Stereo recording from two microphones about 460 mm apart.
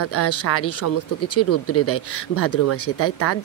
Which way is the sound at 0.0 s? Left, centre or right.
Left.